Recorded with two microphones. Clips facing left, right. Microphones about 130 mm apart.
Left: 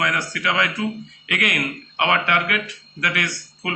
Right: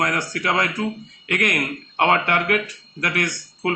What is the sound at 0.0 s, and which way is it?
A man's voice, 45° right (ahead or behind).